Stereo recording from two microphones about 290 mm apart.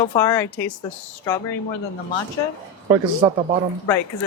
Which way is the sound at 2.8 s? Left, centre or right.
Centre.